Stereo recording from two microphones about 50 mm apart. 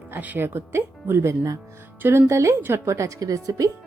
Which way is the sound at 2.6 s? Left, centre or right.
Right.